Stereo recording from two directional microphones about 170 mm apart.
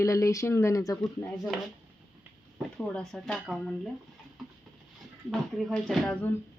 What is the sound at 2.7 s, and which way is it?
Speech, 5° left (ahead or behind).